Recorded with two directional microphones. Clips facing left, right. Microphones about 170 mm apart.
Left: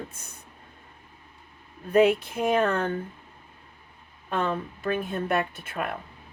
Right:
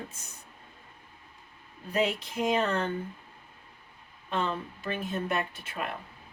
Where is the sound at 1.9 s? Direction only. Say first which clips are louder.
Left 9 dB; 55° left (ahead or behind).